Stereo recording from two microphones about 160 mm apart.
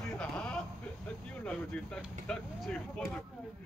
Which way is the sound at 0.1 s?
5° left (ahead or behind).